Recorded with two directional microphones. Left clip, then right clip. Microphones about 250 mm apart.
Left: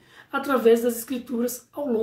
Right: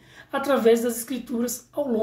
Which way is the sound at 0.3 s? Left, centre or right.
Centre.